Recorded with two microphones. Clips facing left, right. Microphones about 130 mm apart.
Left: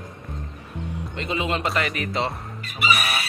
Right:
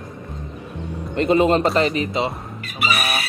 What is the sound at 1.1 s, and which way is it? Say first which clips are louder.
Speech: right 11 dB; 45° right (ahead or behind).